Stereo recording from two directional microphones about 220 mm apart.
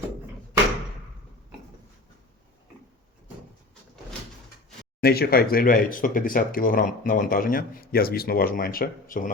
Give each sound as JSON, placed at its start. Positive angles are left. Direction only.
{"t": 4.9, "sound": "speech", "side_deg": 45}